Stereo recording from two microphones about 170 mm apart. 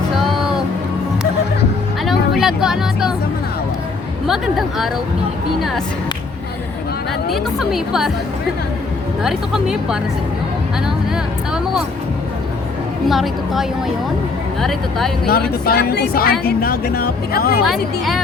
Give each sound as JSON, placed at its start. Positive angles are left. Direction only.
{"t": 2.0, "sound": "music", "side_deg": 0}
{"t": 4.3, "sound": "a woman's voice", "side_deg": 0}
{"t": 7.3, "sound": "a woman's voice", "side_deg": 0}
{"t": 9.2, "sound": "a woman's voice", "side_deg": -5}
{"t": 13.1, "sound": "a woman's voice", "side_deg": 0}
{"t": 15.3, "sound": "speech", "side_deg": 65}